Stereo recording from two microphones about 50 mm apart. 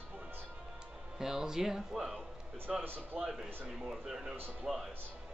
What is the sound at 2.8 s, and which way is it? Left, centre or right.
Speech, right.